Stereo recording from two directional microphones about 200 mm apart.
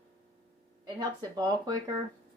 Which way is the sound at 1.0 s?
20° right (ahead or behind).